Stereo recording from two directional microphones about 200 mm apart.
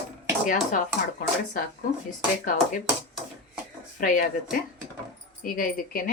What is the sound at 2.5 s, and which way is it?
Speech, 40° left (ahead or behind).